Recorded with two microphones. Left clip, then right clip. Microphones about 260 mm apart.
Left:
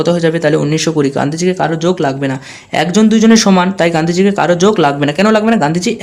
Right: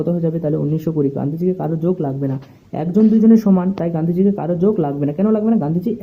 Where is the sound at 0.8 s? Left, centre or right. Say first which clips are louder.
Left 7 dB; centre.